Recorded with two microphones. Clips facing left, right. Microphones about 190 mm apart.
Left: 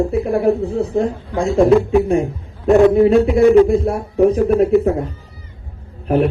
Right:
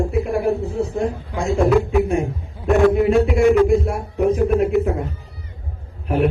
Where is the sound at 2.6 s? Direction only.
35° left (ahead or behind).